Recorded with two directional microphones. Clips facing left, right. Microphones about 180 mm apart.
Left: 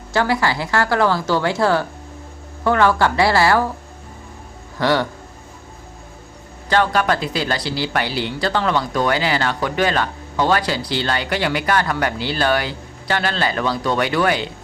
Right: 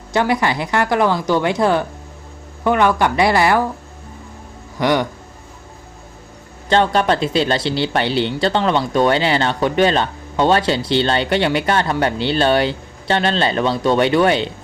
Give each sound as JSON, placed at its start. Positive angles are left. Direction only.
{"t": 0.1, "sound": "speech", "side_deg": -20}
{"t": 4.8, "sound": "speech", "side_deg": -15}
{"t": 6.7, "sound": "speech", "side_deg": -25}